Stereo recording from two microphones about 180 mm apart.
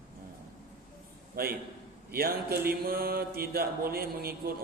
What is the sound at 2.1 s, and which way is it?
Mantra, 55° right (ahead or behind).